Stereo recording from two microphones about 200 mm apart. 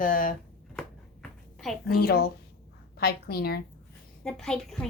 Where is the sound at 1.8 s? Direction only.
50° left (ahead or behind).